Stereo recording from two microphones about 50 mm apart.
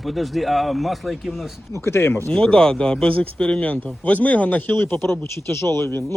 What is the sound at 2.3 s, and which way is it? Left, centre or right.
Speech, centre.